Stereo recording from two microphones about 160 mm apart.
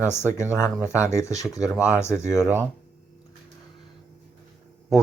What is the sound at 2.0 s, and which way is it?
Speech, 15° left (ahead or behind).